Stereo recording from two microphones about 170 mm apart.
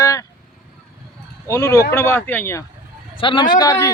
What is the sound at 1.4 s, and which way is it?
Speech, 15° left (ahead or behind).